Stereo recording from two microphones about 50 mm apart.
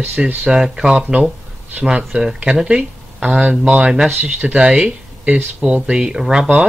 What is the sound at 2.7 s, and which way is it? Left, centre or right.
Speech, right.